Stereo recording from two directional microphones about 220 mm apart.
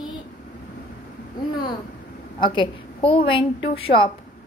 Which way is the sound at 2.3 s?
20° left (ahead or behind).